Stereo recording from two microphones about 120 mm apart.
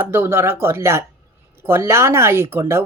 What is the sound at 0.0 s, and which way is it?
A woman's voice, 20° right (ahead or behind).